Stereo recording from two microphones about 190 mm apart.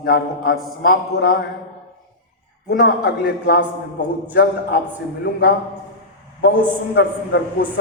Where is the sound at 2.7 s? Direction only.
55° left (ahead or behind).